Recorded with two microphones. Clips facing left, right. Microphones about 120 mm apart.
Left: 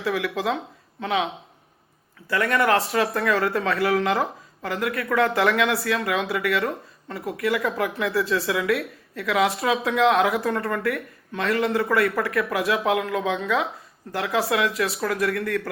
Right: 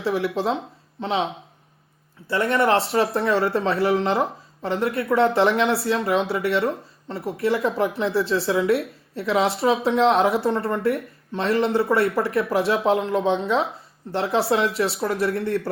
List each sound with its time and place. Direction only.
0.0 s a woman's voice: 30° right (ahead or behind)